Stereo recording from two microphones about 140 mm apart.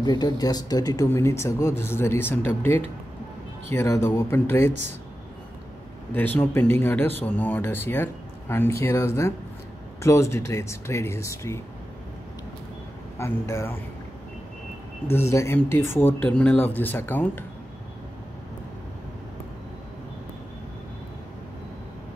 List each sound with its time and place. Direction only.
0.0 s speech: 30° left (ahead or behind)
6.1 s speech: 10° left (ahead or behind)
13.2 s speech: 20° left (ahead or behind)
15.0 s speech: 15° left (ahead or behind)